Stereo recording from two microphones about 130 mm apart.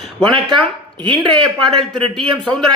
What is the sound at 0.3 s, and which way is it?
Speech, 40° right (ahead or behind).